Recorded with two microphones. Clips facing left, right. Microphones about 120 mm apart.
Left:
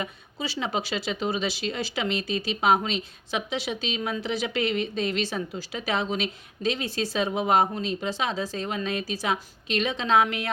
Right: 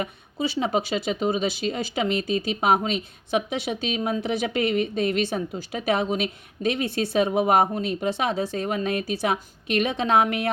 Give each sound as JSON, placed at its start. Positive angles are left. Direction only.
{"t": 0.0, "sound": "speech", "side_deg": -55}